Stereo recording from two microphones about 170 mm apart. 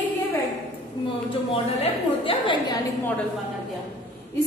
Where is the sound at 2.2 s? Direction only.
30° left (ahead or behind).